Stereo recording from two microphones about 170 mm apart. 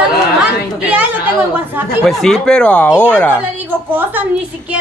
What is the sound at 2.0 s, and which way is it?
Speech, centre (ahead or behind).